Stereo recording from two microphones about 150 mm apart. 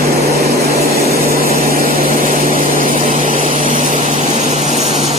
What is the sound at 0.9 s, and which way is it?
Vehicle, 85° right.